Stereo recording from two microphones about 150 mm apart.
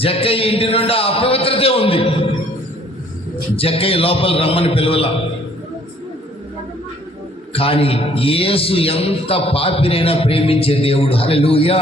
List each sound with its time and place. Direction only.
0.0 s a man's voice: 40° left (ahead or behind)
3.5 s a man's voice: 40° left (ahead or behind)
7.5 s a man's voice: 40° left (ahead or behind)